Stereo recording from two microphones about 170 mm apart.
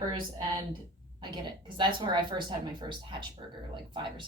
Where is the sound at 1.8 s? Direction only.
25° right (ahead or behind).